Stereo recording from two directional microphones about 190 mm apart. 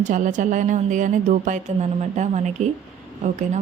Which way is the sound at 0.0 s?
40° right (ahead or behind).